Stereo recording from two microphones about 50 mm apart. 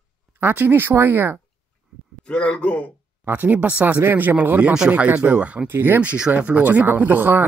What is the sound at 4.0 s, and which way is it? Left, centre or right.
Speech, right.